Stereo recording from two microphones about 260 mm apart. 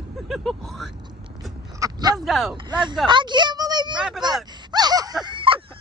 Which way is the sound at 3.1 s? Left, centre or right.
Centre.